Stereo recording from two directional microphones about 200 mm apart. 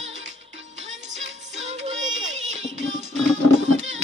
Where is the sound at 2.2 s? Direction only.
70° right (ahead or behind).